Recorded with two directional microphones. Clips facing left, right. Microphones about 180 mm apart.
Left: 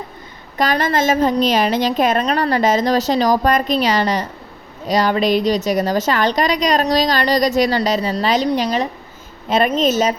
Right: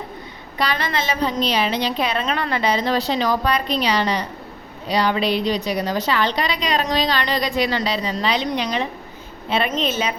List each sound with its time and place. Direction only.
0.6 s a woman's voice: 45° left (ahead or behind)